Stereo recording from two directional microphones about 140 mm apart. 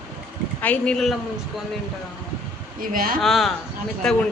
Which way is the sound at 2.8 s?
85° right.